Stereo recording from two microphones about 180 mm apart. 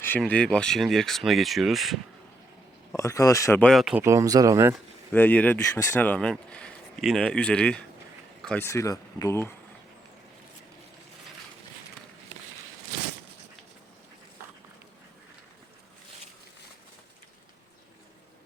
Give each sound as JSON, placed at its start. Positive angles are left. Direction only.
{"t": 0.0, "sound": "speech", "side_deg": 10}
{"t": 2.9, "sound": "speech", "side_deg": 15}
{"t": 3.7, "sound": "speech", "side_deg": 0}
{"t": 4.0, "sound": "speech", "side_deg": -15}
{"t": 5.1, "sound": "speech", "side_deg": 10}
{"t": 8.4, "sound": "a sound", "side_deg": 5}
{"t": 8.6, "sound": "speech", "side_deg": 15}